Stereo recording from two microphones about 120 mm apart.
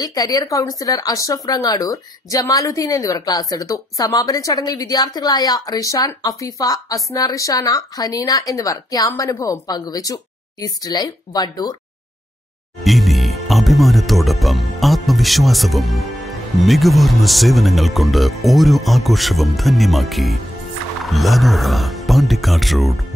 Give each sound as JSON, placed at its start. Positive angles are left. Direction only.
{"t": 0.0, "sound": "speech", "side_deg": 30}
{"t": 12.8, "sound": "speech", "side_deg": 0}